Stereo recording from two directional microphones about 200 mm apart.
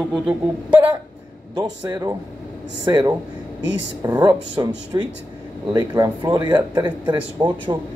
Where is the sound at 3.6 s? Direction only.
65° right (ahead or behind).